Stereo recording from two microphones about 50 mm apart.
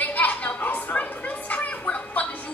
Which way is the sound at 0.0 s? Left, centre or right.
Left.